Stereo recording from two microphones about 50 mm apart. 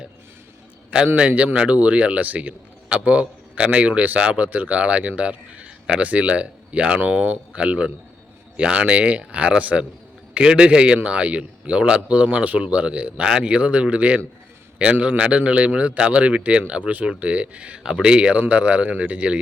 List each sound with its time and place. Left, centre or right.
0.9 s a man's voice: right